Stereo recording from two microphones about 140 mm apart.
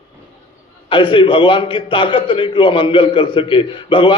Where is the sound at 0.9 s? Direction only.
35° left (ahead or behind).